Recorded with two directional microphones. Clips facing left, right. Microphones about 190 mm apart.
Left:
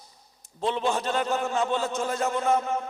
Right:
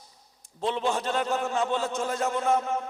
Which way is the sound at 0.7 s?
25° left (ahead or behind).